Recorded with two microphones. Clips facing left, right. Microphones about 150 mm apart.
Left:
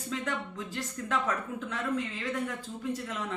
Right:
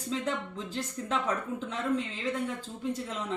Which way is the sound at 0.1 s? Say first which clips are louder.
Right 2 dB; 30° right (ahead or behind).